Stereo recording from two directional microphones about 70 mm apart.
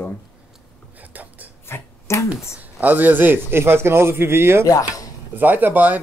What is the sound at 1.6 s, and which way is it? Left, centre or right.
Finger snapping, left.